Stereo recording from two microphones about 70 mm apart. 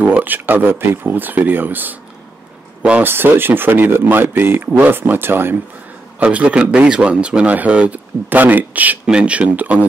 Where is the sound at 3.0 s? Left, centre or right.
Right.